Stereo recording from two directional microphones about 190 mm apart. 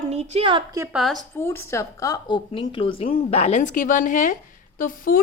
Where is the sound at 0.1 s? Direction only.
35° right (ahead or behind).